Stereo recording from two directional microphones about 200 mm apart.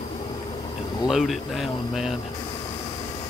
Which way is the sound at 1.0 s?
Centre (ahead or behind).